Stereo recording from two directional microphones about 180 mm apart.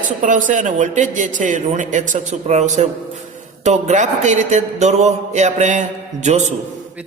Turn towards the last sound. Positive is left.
turn(degrees=-40)  # may be behind; listen again after turning